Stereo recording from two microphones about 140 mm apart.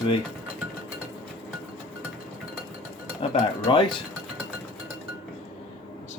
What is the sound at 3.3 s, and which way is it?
Dishes, 40° left (ahead or behind).